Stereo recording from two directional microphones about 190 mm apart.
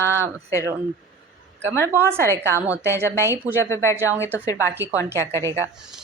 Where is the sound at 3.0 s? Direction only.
15° left (ahead or behind).